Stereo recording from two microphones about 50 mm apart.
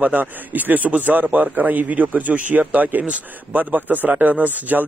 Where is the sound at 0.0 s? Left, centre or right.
Right.